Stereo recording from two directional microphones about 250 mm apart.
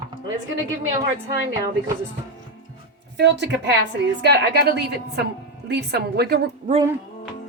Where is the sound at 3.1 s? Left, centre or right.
Right.